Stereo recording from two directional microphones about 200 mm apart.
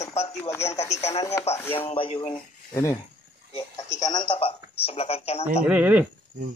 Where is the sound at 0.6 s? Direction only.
35° left (ahead or behind).